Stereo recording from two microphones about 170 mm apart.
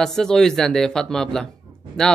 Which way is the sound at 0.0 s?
5° left (ahead or behind).